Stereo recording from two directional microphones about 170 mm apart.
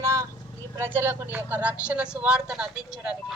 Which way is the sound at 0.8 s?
10° right (ahead or behind).